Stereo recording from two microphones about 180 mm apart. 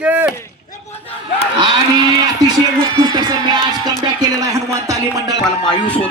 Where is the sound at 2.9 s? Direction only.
20° right (ahead or behind).